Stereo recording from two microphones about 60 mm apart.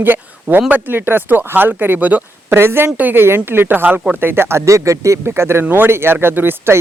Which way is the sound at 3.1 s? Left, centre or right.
Right.